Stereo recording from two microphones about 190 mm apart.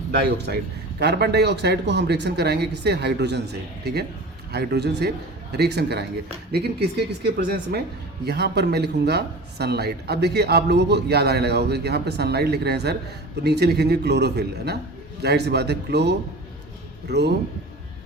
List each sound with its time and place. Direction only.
0.2 s speech: 60° right (ahead or behind)